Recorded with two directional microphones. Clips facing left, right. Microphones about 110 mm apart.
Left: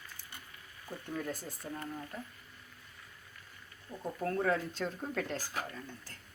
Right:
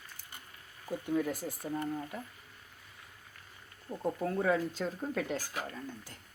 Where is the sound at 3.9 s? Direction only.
20° right (ahead or behind).